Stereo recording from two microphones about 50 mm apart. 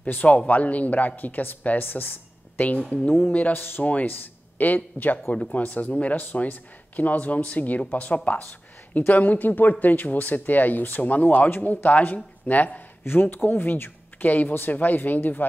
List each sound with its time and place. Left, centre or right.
0.0 s speech: left
3.5 s speech: left
13.0 s speech: left